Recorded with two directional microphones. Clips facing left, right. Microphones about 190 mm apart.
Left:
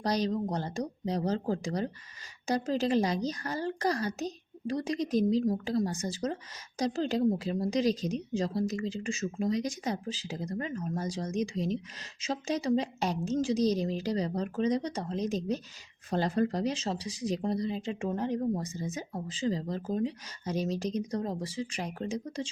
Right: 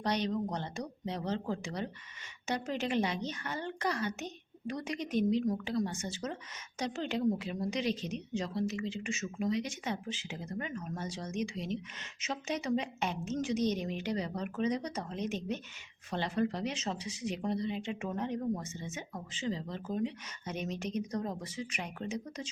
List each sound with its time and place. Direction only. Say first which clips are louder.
0.0 s speech: left 3 dB; 35° left (ahead or behind)